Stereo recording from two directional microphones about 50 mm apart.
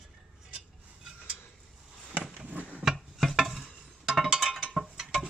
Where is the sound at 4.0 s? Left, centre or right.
Centre.